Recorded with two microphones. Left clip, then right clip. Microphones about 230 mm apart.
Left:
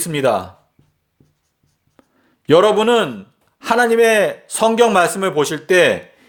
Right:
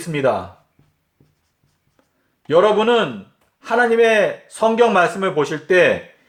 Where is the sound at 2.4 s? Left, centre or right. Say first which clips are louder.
Left 2 dB; left.